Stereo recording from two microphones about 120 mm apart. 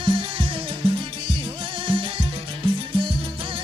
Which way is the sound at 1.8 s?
45° right (ahead or behind).